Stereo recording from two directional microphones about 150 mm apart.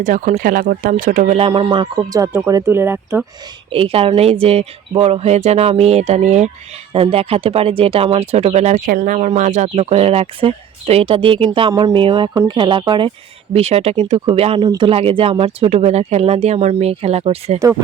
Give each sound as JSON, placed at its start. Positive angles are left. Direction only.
{"t": 0.0, "sound": "speech", "side_deg": -60}
{"t": 1.4, "sound": "speech", "side_deg": -35}
{"t": 2.1, "sound": "speech", "side_deg": -15}
{"t": 3.7, "sound": "speech", "side_deg": -40}
{"t": 8.9, "sound": "speech", "side_deg": -60}
{"t": 9.7, "sound": "speech", "side_deg": -40}
{"t": 11.7, "sound": "speech", "side_deg": -25}
{"t": 11.9, "sound": "speech", "side_deg": -35}